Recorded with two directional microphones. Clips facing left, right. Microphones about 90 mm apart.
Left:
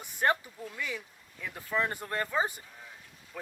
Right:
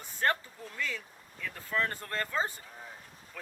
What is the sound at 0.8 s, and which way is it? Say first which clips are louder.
Speech: right 2 dB; 15° left (ahead or behind).